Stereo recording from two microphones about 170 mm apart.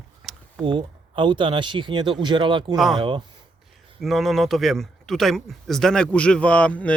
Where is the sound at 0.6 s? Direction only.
30° right (ahead or behind).